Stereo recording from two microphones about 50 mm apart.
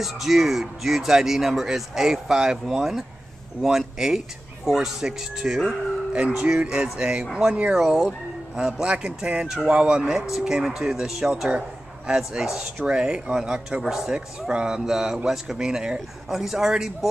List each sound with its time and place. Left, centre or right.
0.0 s speech: centre
6.1 s a man's voice: right